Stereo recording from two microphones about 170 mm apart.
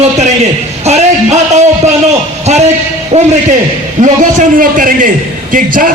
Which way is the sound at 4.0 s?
50° right (ahead or behind).